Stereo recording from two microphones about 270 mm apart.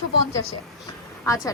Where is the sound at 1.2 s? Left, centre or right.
Centre.